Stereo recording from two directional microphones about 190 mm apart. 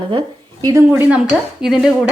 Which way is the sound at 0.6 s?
10° right (ahead or behind).